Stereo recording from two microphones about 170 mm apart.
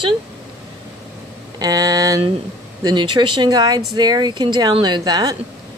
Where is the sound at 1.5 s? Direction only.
20° right (ahead or behind).